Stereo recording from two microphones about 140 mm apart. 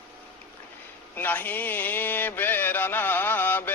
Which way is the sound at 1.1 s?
15° left (ahead or behind).